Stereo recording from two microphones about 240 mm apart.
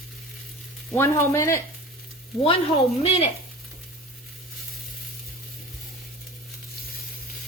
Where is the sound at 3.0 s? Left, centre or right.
Left.